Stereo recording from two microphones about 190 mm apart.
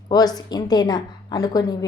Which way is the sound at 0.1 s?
20° left (ahead or behind).